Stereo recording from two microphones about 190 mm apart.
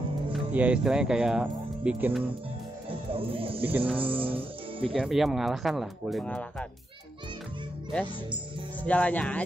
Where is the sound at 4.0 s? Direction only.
30° right (ahead or behind).